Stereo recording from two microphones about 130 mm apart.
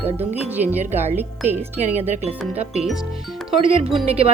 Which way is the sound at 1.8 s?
60° right (ahead or behind).